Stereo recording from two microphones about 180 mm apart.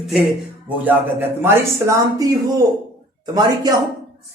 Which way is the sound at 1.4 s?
15° right (ahead or behind).